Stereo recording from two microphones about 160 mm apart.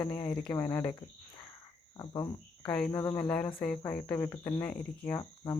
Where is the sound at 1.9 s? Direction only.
25° left (ahead or behind).